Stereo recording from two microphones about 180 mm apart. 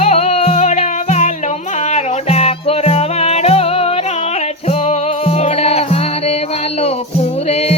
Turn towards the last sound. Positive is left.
turn(degrees=35)  # may be behind; listen again after turning